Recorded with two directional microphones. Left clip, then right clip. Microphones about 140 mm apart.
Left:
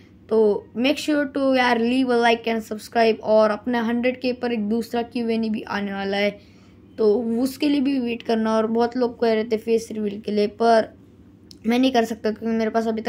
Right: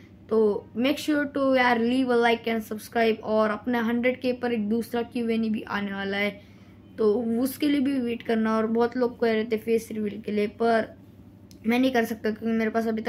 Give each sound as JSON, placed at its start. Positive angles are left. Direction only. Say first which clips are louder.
{"t": 0.3, "sound": "speech", "louder": "left 4 dB", "side_deg": 25}